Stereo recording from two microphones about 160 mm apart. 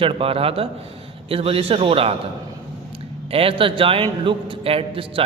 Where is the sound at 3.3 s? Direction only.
35° right (ahead or behind).